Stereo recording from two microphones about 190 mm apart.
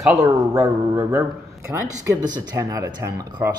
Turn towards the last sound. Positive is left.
turn(degrees=-15)  # may be behind; listen again after turning